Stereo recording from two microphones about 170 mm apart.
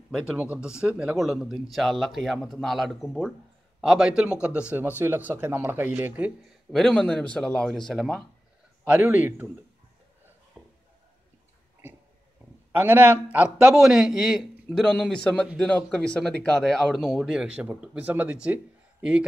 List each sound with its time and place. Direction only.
0.3 s a man's voice: 5° right (ahead or behind)
6.7 s speech: 5° left (ahead or behind)
8.8 s a man's voice: 10° right (ahead or behind)
10.6 s a sound: 5° right (ahead or behind)
12.7 s speech: 10° right (ahead or behind)